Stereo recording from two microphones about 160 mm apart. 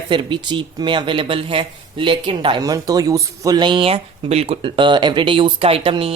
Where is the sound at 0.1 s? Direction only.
30° right (ahead or behind).